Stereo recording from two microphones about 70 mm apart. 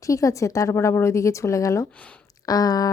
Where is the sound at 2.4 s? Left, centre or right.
Left.